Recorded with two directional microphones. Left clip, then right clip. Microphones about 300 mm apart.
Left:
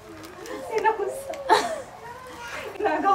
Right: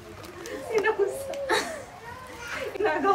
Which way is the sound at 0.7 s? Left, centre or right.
Centre.